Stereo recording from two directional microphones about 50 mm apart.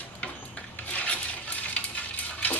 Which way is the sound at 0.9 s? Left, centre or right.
Left.